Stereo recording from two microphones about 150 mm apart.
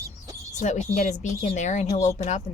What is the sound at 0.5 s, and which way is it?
Speech, 55° left (ahead or behind).